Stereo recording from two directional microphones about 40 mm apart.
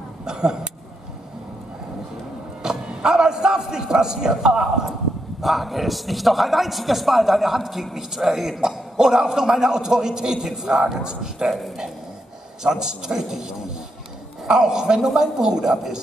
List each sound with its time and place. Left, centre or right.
0.2 s speech: centre
2.6 s a man's voice: centre
5.4 s a man's voice: centre
12.6 s a man's voice: centre